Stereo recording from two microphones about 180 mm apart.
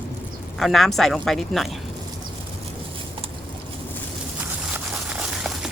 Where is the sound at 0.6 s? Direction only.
Centre (ahead or behind).